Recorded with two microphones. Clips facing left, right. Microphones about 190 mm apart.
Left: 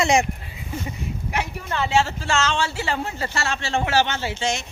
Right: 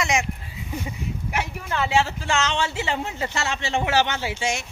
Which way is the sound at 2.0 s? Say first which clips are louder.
Left 1 dB; 15° right (ahead or behind).